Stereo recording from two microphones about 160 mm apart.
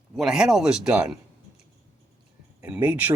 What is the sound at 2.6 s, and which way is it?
Speech, 10° right (ahead or behind).